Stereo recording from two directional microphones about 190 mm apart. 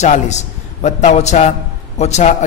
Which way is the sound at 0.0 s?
35° left (ahead or behind).